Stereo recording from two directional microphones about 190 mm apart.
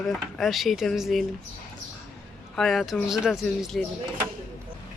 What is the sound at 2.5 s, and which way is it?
Speech, centre (ahead or behind).